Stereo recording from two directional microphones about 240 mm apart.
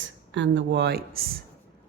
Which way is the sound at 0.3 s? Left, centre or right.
Right.